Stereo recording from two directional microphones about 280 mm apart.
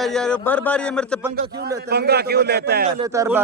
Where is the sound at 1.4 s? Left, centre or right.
Right.